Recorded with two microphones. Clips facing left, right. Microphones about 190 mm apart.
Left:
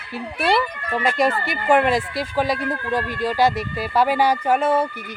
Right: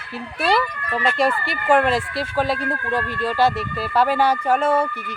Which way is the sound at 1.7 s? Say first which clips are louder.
Even; 15° left (ahead or behind).